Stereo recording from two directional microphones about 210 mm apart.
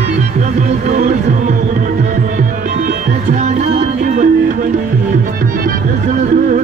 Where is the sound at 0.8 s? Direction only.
35° right (ahead or behind).